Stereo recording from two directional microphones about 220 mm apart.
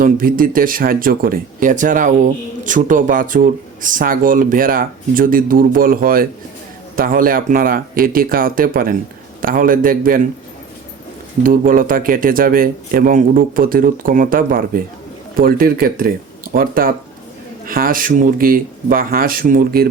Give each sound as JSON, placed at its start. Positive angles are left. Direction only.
{"t": 0.0, "sound": "speech", "side_deg": -40}
{"t": 11.4, "sound": "speech", "side_deg": -40}